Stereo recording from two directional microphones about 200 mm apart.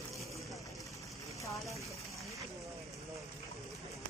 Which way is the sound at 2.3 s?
15° right (ahead or behind).